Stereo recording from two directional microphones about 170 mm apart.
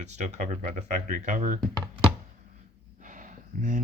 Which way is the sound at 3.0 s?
50° right (ahead or behind).